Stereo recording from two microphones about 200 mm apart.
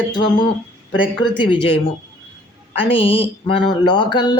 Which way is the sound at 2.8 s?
25° left (ahead or behind).